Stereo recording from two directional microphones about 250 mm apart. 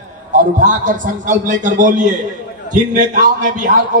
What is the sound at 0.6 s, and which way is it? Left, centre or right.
A man's voice, right.